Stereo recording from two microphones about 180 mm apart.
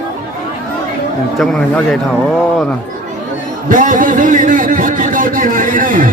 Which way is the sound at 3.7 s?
50° right (ahead or behind).